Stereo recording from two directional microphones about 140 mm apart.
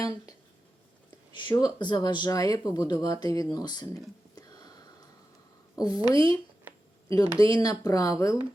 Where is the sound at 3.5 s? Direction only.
30° left (ahead or behind).